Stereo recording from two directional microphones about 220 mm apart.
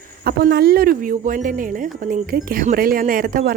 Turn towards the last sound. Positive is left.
turn(degrees=-40)  # may be behind; listen again after turning